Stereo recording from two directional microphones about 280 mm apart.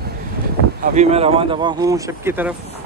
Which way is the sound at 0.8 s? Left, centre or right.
Right.